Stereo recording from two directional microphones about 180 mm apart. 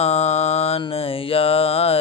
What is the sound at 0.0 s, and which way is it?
Mantra, 35° left (ahead or behind).